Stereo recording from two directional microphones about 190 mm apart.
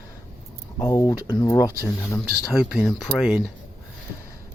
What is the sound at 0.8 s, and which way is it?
Speech, 20° left (ahead or behind).